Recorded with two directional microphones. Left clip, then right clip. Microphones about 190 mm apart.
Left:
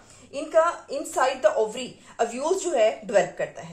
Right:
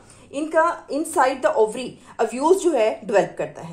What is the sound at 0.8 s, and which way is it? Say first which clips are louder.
A woman's voice: right 5 dB; 55° right (ahead or behind).